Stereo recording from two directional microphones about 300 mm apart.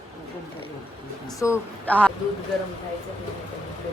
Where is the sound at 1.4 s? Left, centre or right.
Centre.